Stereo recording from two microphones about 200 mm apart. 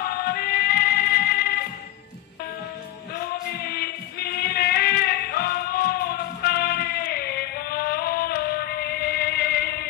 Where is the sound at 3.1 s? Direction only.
55° left (ahead or behind).